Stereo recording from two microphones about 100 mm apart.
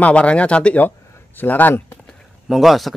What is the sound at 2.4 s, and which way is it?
Speech, centre (ahead or behind).